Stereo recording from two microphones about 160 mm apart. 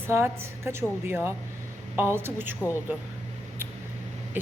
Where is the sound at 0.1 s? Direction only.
15° right (ahead or behind).